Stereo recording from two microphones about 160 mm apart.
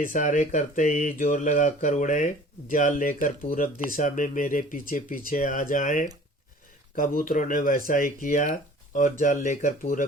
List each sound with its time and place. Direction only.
0.0 s speech: 55° left (ahead or behind)